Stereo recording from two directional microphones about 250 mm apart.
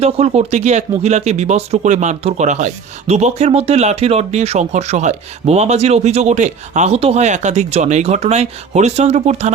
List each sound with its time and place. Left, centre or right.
0.0 s speech: right